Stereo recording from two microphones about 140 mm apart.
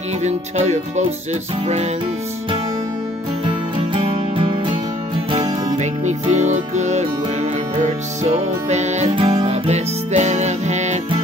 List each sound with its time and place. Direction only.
0.2 s speech: 55° right (ahead or behind)
3.9 s music: 40° right (ahead or behind)
5.3 s music: 50° right (ahead or behind)
9.1 s music: 40° right (ahead or behind)